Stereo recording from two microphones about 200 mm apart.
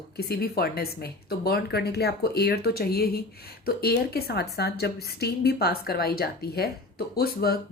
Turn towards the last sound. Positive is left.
turn(degrees=50)  # may be behind; listen again after turning